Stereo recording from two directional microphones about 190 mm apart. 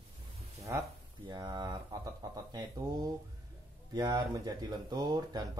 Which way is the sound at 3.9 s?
20° right (ahead or behind).